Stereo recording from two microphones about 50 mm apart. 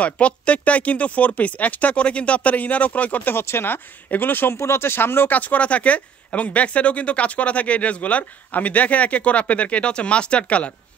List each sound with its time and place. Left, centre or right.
0.0 s speech: left
3.3 s speech: left
4.6 s speech: left
5.3 s speech: left